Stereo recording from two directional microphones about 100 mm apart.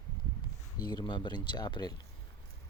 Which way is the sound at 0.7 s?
45° left (ahead or behind).